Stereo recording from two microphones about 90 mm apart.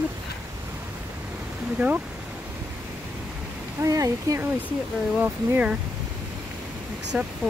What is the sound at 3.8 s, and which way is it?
Speech, 40° right (ahead or behind).